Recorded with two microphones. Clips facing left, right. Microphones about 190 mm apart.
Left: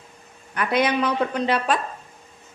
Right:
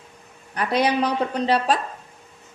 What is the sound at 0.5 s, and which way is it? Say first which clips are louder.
Speech: even; 35° right (ahead or behind).